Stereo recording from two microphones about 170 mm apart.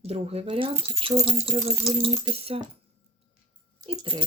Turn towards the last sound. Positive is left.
turn(degrees=-30)  # may be behind; listen again after turning